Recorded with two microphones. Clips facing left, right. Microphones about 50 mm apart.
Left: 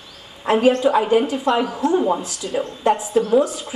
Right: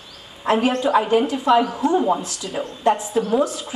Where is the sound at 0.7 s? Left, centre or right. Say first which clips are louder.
Left 5 dB; centre.